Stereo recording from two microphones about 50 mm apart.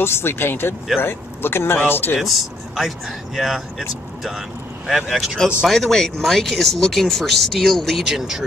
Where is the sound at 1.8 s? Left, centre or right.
Left.